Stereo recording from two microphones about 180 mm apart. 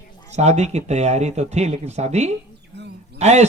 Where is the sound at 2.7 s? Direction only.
70° right (ahead or behind).